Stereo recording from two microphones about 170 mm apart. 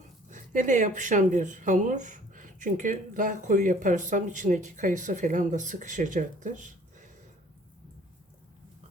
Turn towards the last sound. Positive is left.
turn(degrees=-50)  # may be behind; listen again after turning